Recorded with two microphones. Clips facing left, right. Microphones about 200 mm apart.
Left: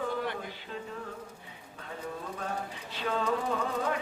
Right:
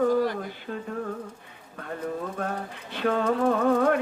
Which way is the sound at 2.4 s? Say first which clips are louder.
Right 5 dB; 60° right (ahead or behind).